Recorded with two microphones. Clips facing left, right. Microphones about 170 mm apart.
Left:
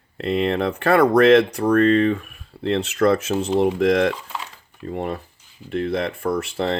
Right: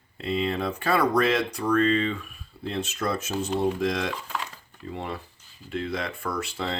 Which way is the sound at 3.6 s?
60° left (ahead or behind).